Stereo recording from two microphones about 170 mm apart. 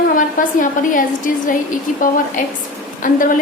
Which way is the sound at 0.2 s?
50° left (ahead or behind).